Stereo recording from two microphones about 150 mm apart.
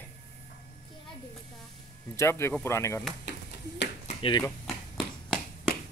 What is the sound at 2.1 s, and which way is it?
Speech, 15° left (ahead or behind).